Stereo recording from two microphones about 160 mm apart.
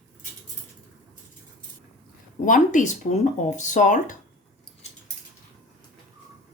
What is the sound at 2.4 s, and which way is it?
Speech, 55° left (ahead or behind).